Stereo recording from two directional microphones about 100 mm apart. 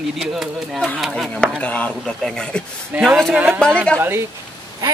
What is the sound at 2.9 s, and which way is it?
Speech, 15° right (ahead or behind).